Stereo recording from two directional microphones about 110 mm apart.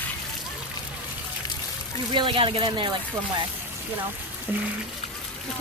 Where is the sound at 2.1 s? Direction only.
50° right (ahead or behind).